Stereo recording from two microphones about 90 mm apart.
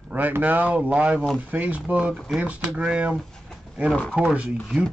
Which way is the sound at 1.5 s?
15° right (ahead or behind).